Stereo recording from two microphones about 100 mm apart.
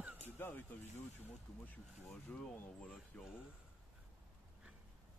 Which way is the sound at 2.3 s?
15° left (ahead or behind).